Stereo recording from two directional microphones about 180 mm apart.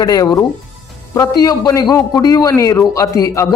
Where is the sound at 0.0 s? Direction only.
20° left (ahead or behind).